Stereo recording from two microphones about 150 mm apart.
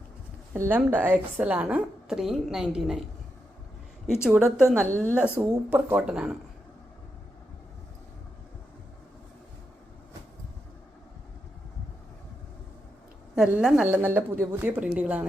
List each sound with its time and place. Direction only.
0.5 s a woman's voice: 15° right (ahead or behind)
4.2 s a woman's voice: 5° right (ahead or behind)
4.9 s a woman's voice: 10° left (ahead or behind)
5.1 s speech: 10° right (ahead or behind)
13.3 s a woman's voice: 5° right (ahead or behind)
13.8 s speech: 15° right (ahead or behind)